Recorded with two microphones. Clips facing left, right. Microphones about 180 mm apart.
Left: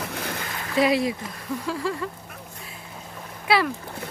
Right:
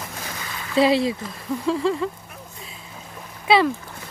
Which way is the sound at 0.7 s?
30° right (ahead or behind).